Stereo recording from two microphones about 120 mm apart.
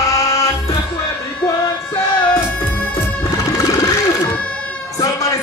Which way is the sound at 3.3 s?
30° left (ahead or behind).